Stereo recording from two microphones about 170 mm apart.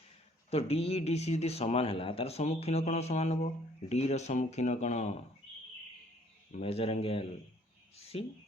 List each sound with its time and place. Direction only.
0.5 s speech: 35° left (ahead or behind)
6.5 s speech: 35° left (ahead or behind)